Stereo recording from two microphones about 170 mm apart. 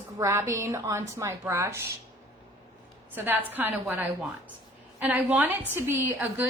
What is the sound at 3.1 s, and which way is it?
A woman's voice, 10° right (ahead or behind).